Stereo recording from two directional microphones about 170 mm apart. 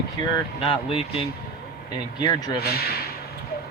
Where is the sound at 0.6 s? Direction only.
35° left (ahead or behind).